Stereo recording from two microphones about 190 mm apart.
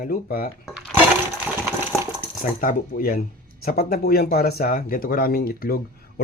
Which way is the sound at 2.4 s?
45° left (ahead or behind).